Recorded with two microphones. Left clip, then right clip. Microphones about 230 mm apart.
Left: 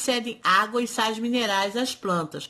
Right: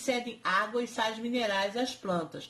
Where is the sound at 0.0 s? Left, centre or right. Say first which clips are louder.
Left 7 dB; left.